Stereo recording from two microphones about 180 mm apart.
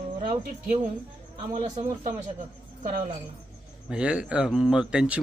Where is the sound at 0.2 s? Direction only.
50° right (ahead or behind).